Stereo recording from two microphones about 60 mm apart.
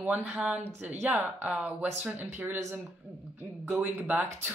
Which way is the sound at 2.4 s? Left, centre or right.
Right.